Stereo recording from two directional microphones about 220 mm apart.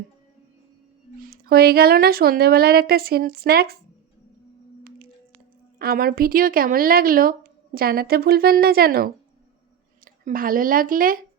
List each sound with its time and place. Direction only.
1.2 s speech: 45° right (ahead or behind)
5.8 s speech: 40° right (ahead or behind)